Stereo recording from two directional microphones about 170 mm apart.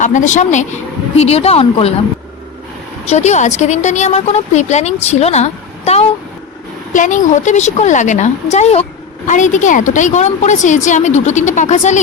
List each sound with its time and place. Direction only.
0.0 s a woman's voice: 45° left (ahead or behind)
3.1 s a woman's voice: 45° left (ahead or behind)
6.9 s a woman's voice: 50° left (ahead or behind)